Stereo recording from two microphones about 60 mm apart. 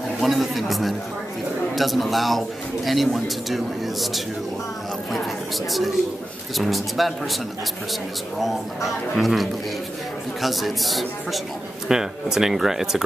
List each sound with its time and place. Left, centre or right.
0.2 s a man's voice: centre
8.4 s a man's voice: centre